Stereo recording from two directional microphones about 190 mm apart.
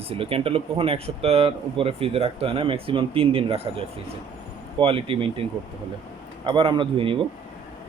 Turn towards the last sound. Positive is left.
turn(degrees=-25)  # may be behind; listen again after turning